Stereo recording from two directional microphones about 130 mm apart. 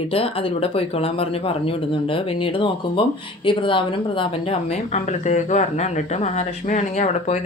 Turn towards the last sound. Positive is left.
turn(degrees=65)  # may be behind; listen again after turning